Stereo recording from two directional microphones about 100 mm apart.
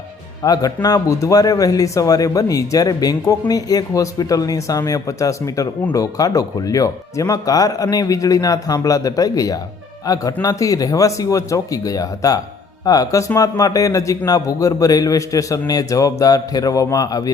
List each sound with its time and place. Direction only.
0.4 s a man's voice: 40° left (ahead or behind)